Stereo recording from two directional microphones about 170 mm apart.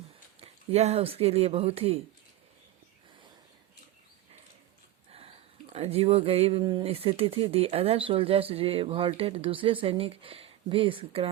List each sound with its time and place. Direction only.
0.3 s speech: 35° right (ahead or behind)
5.7 s speech: 35° right (ahead or behind)